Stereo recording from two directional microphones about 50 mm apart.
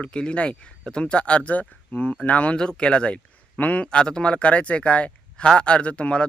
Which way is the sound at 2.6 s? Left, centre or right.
Centre.